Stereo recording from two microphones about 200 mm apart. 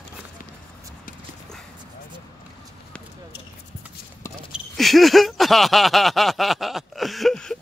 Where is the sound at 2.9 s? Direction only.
5° left (ahead or behind).